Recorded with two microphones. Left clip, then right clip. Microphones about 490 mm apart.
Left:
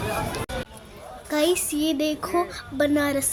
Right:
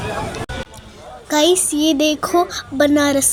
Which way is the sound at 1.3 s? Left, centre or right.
Left.